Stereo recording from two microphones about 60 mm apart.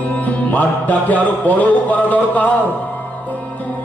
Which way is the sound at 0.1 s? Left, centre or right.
Left.